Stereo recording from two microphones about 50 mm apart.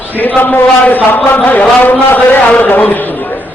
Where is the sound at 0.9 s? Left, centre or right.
Left.